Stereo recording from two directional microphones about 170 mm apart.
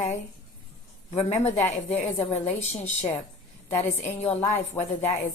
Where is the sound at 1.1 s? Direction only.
40° left (ahead or behind).